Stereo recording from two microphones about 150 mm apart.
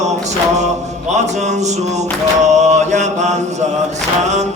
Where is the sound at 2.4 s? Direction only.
50° right (ahead or behind).